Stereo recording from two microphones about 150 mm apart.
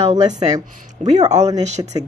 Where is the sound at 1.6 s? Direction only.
50° right (ahead or behind).